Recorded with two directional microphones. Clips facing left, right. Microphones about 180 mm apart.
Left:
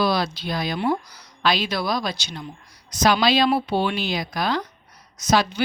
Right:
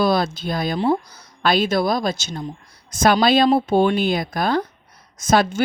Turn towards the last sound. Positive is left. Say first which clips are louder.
# right 3 dB
turn(degrees=-50)  # may be behind; listen again after turning